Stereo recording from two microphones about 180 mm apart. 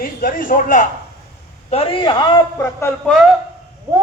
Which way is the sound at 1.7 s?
35° left (ahead or behind).